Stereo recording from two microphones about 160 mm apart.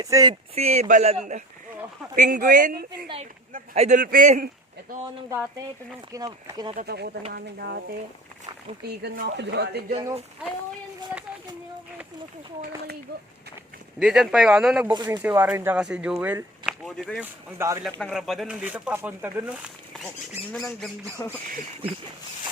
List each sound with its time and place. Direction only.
0.0 s speech: 20° right (ahead or behind)
0.5 s a man's voice: 40° right (ahead or behind)
5.3 s speech: 15° right (ahead or behind)
6.7 s speech: 90° right
14.0 s speech: 5° right (ahead or behind)
14.9 s speech: 25° right (ahead or behind)
15.2 s speech: 10° right (ahead or behind)
17.2 s speech: 20° right (ahead or behind)
18.0 s speech: centre (ahead or behind)
21.2 s speech: 20° left (ahead or behind)